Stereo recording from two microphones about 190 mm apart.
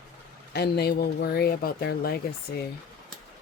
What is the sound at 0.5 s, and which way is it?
Speech, 55° left (ahead or behind).